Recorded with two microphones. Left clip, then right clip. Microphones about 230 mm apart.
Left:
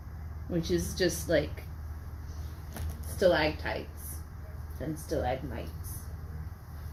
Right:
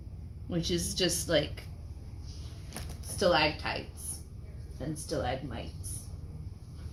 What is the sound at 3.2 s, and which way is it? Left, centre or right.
Speech, centre.